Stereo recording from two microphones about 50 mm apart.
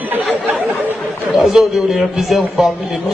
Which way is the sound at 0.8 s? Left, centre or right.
Right.